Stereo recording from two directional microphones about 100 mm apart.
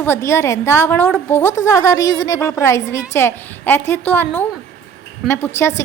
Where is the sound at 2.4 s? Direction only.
25° left (ahead or behind).